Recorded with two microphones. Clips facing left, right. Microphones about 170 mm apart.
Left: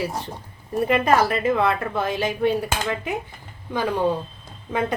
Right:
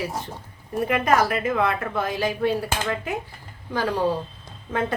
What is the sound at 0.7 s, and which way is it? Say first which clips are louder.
A woman's voice: left 2 dB; 30° left (ahead or behind).